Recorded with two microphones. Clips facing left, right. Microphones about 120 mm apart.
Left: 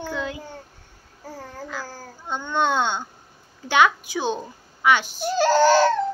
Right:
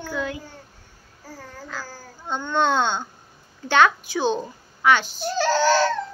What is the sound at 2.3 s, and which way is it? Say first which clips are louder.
A child's voice: right 1 dB; 10° left (ahead or behind).